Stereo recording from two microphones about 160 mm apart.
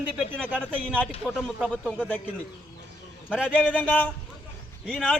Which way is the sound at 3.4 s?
10° left (ahead or behind).